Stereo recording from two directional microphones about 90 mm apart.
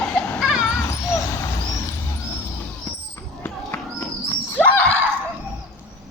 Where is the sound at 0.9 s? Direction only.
35° left (ahead or behind).